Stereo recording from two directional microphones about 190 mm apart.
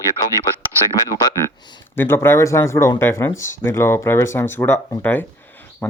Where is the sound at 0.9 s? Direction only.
20° left (ahead or behind).